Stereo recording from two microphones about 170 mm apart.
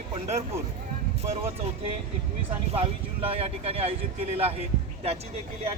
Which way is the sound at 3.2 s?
35° right (ahead or behind).